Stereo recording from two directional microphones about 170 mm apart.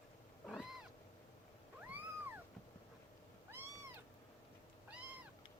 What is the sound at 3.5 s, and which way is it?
Cat, 15° right (ahead or behind).